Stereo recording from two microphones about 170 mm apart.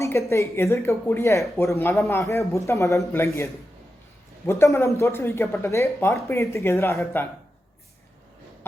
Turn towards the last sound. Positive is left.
turn(degrees=15)  # may be behind; listen again after turning